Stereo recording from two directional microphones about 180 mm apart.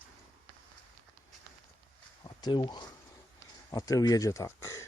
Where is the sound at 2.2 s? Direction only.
25° left (ahead or behind).